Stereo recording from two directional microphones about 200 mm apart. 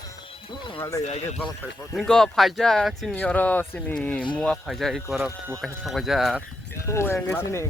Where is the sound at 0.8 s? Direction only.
15° left (ahead or behind).